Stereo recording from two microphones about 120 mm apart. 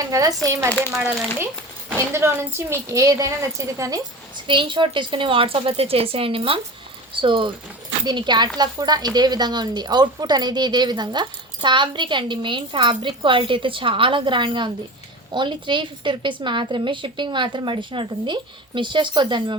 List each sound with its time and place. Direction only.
0.0 s a woman's voice: 30° right (ahead or behind)
0.7 s speech: 10° left (ahead or behind)
2.1 s a woman's voice: 20° right (ahead or behind)
4.4 s a woman's voice: 45° right (ahead or behind)